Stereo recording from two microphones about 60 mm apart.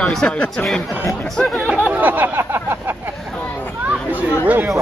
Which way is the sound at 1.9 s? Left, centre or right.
Right.